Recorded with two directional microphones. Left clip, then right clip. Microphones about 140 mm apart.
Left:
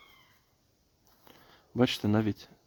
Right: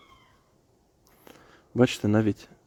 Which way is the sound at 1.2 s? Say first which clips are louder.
Right 5 dB; 20° right (ahead or behind).